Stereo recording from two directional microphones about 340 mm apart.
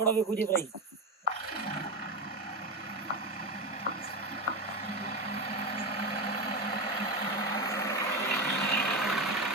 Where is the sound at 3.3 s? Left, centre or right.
Left.